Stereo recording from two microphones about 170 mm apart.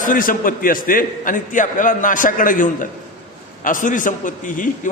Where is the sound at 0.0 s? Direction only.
55° left (ahead or behind).